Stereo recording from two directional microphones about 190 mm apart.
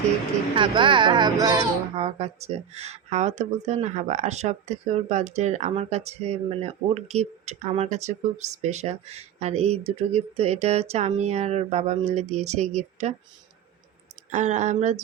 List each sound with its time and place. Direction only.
0.5 s speech: 25° right (ahead or behind)
2.0 s speech: 35° right (ahead or behind)
14.3 s speech: 40° right (ahead or behind)